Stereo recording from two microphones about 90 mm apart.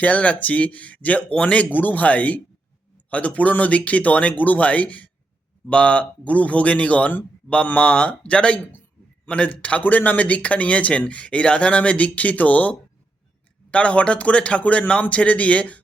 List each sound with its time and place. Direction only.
0.0 s speech: 15° left (ahead or behind)